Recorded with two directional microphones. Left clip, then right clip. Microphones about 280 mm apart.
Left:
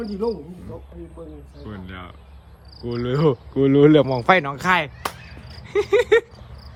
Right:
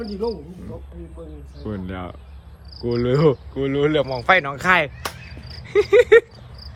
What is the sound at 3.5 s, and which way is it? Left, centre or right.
Speech, left.